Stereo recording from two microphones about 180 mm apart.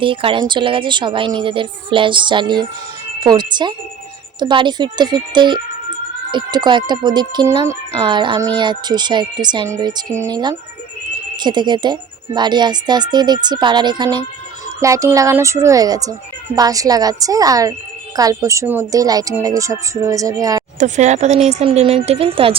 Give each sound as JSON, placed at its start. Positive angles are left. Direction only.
{"t": 0.0, "sound": "speech", "side_deg": -30}
{"t": 20.7, "sound": "speech", "side_deg": -40}